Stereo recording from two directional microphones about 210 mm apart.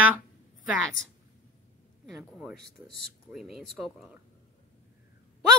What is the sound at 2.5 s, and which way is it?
Speech, 50° right (ahead or behind).